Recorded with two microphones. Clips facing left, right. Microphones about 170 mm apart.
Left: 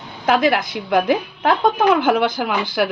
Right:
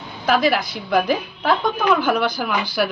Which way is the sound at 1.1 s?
65° left (ahead or behind).